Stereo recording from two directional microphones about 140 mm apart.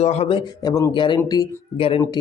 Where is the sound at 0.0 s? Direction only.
50° left (ahead or behind).